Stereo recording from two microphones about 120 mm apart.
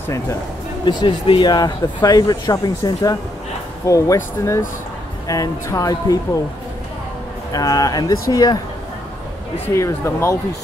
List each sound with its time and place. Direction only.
0.8 s speech: 45° left (ahead or behind); by 6.1 s 30° left (ahead or behind)
7.5 s speech: 30° left (ahead or behind)
9.8 s speech: 25° left (ahead or behind)